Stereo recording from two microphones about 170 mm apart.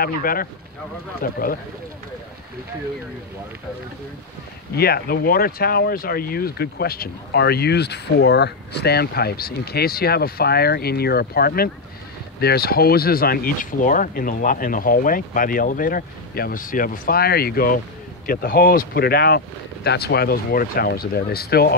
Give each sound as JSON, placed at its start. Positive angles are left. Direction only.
{"t": 0.0, "sound": "speech", "side_deg": 60}
{"t": 4.7, "sound": "speech", "side_deg": 65}